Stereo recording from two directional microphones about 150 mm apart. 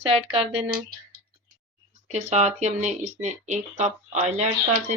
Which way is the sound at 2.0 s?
50° right (ahead or behind).